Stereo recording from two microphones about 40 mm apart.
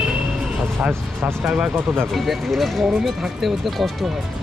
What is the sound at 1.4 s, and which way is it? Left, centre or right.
Speech, centre.